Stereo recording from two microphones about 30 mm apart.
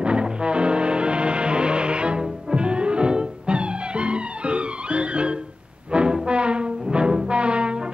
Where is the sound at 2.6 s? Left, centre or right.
Right.